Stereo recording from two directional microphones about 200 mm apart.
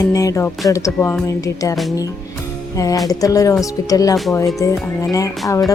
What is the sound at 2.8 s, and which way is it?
Speech, 15° left (ahead or behind).